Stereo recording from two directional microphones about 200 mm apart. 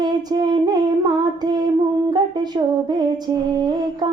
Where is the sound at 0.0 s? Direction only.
20° right (ahead or behind).